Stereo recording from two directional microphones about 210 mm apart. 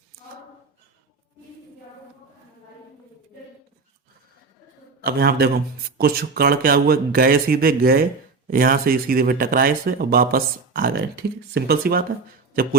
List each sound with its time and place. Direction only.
4.9 s a man's voice: 45° right (ahead or behind)